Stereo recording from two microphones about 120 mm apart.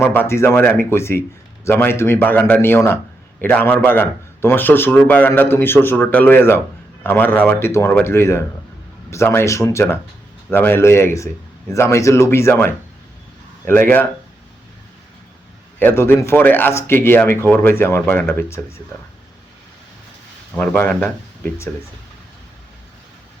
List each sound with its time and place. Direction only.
0.0 s a man's voice: 20° left (ahead or behind)
15.8 s speech: 20° left (ahead or behind)
20.6 s a man's voice: 15° left (ahead or behind)